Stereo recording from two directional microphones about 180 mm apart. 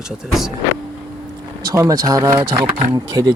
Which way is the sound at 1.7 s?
20° right (ahead or behind).